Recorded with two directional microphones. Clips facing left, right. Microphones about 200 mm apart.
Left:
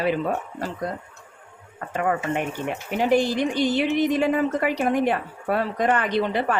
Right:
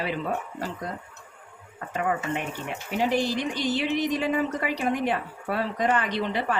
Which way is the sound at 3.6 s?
55° left (ahead or behind).